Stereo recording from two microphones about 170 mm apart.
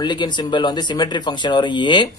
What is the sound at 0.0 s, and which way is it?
Speech, 25° left (ahead or behind).